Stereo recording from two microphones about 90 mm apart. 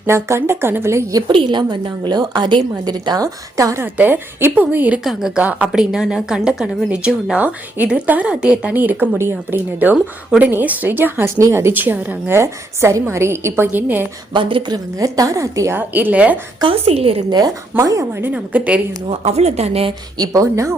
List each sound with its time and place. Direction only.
0.0 s a woman's voice: 30° right (ahead or behind)
1.3 s a woman's voice: 60° right (ahead or behind); by 3.8 s 40° right (ahead or behind)
3.9 s a woman's voice: 20° right (ahead or behind)
5.0 s a woman's voice: 5° right (ahead or behind)
5.4 s a woman's voice: 15° right (ahead or behind)
9.9 s a woman's voice: 15° right (ahead or behind)
11.3 s a woman's voice: 30° right (ahead or behind)
14.3 s a woman's voice: 65° right (ahead or behind)
14.9 s a woman's voice: 40° right (ahead or behind)
15.9 s a woman's voice: 20° right (ahead or behind)
16.6 s a woman's voice: 90° right
17.3 s a woman's voice: 45° right (ahead or behind)
18.3 s a woman's voice: 15° right (ahead or behind)
20.1 s a woman's voice: 40° right (ahead or behind)